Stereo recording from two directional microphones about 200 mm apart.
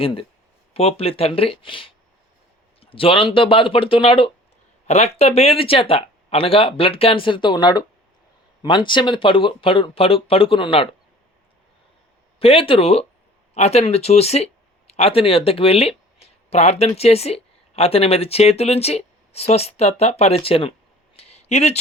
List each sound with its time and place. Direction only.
0.0 s speech: 25° left (ahead or behind)
12.4 s speech: 30° left (ahead or behind)
21.2 s a sound: 30° left (ahead or behind)